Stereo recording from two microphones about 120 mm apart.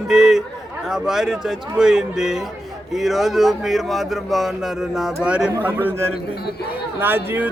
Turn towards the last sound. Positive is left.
turn(degrees=-15)  # may be behind; listen again after turning